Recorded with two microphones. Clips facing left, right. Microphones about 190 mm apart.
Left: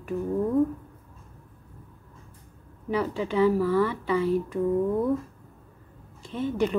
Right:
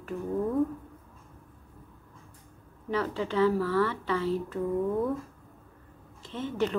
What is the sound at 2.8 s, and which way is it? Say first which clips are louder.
A woman's voice: left 3 dB; 15° left (ahead or behind).